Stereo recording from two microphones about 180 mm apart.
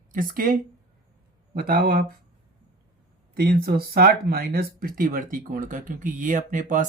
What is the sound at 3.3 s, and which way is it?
Speech, 60° right (ahead or behind).